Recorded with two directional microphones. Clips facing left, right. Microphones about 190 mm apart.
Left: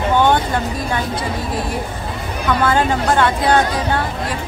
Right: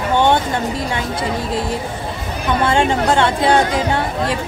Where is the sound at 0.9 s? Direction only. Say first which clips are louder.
Even; 25° right (ahead or behind).